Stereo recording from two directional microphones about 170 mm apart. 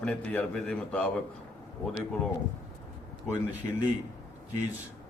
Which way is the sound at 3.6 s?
10° left (ahead or behind).